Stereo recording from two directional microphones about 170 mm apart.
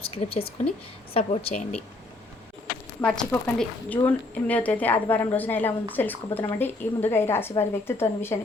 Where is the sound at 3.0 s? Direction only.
10° left (ahead or behind).